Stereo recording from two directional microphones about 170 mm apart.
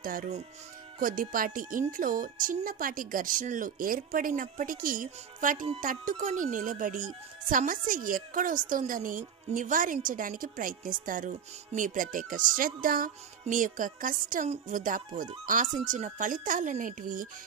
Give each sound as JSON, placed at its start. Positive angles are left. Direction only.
{"t": 0.0, "sound": "speech", "side_deg": -55}